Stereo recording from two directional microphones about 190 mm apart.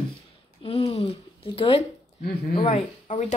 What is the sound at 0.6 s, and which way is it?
Speech, 30° left (ahead or behind).